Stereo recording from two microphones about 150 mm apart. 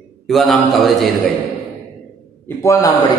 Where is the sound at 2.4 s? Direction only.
20° left (ahead or behind).